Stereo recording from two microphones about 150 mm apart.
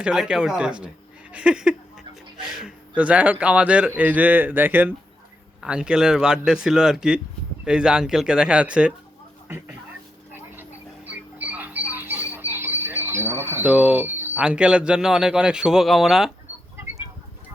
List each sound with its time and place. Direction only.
0.0 s a man's voice: 5° right (ahead or behind)
10.6 s music: 10° right (ahead or behind)